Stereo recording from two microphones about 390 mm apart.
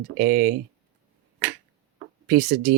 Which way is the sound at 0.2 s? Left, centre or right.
Right.